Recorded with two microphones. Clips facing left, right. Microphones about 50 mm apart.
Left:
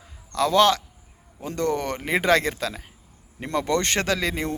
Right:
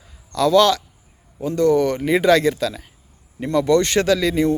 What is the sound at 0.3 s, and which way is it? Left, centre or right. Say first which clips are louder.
Speech: right 4 dB; left.